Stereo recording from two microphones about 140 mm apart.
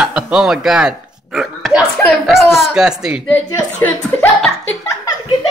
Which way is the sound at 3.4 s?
25° left (ahead or behind).